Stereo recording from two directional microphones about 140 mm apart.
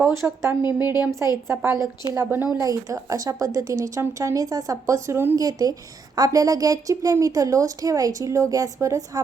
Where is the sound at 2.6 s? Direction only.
25° right (ahead or behind).